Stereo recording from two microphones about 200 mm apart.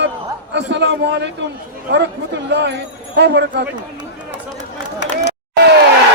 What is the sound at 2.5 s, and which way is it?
A man's voice, 60° right (ahead or behind).